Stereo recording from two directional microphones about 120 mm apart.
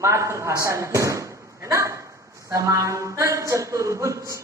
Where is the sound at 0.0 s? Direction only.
25° right (ahead or behind).